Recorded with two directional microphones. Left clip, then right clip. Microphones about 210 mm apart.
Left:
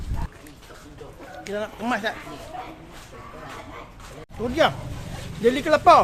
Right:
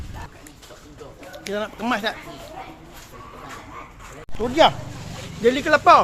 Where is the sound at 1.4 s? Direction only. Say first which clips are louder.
Right 2 dB; 25° right (ahead or behind).